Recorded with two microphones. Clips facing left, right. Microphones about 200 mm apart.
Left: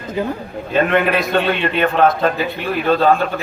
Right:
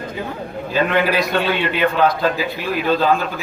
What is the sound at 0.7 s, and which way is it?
Speech, 55° left (ahead or behind).